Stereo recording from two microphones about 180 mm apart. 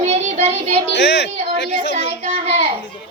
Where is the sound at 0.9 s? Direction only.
75° left (ahead or behind).